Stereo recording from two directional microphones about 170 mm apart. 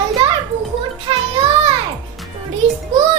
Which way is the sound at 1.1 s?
30° right (ahead or behind).